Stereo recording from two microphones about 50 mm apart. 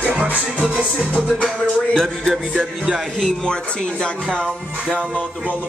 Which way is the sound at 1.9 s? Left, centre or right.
Centre.